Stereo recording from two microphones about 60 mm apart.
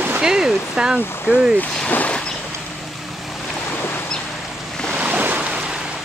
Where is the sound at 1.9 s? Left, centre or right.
Left.